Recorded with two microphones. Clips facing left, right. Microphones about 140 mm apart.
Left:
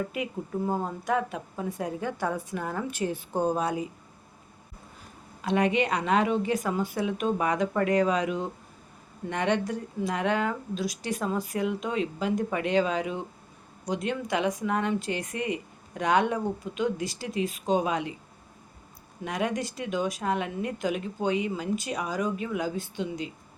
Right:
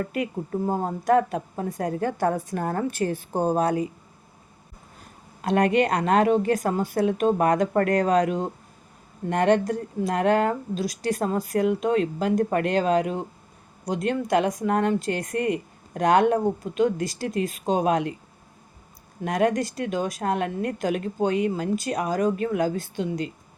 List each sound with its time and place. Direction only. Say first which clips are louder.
0.8 s a woman's voice: right 7 dB; 40° right (ahead or behind)
5.4 s a woman's voice: right 4 dB; 50° right (ahead or behind)
19.2 s a woman's voice: right 7 dB; 50° right (ahead or behind)